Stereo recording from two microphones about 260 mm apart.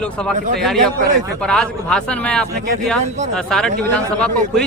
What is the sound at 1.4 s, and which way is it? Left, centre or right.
A man's voice, centre.